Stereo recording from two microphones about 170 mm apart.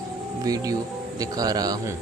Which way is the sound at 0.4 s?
20° right (ahead or behind).